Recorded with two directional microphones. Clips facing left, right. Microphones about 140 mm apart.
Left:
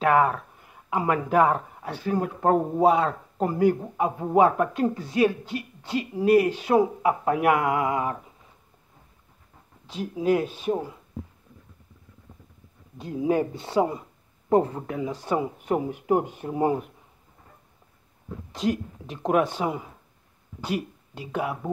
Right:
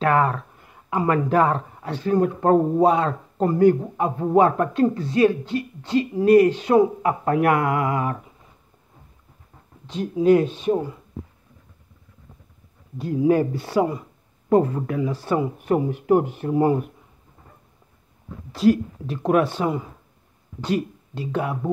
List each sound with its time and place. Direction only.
0.0 s a man's voice: 10° left (ahead or behind)
9.8 s speech: 5° left (ahead or behind)
12.9 s a man's voice: 20° left (ahead or behind)
18.5 s a man's voice: 20° left (ahead or behind)